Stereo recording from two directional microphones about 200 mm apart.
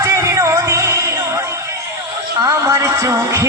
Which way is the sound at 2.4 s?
15° right (ahead or behind).